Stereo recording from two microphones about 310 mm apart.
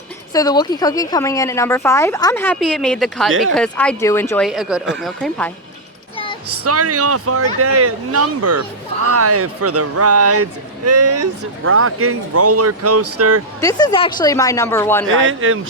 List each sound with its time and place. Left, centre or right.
0.3 s speech: centre
6.7 s speech: right
13.6 s speech: centre
15.0 s speech: right